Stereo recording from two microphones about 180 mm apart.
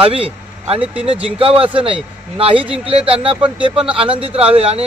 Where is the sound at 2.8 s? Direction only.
30° right (ahead or behind).